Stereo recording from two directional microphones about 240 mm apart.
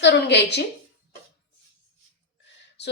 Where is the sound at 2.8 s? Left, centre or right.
Left.